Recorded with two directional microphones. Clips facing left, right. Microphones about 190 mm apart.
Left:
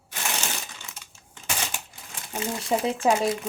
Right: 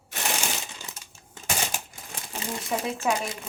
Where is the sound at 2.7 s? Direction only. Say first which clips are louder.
Left 5 dB; 25° left (ahead or behind).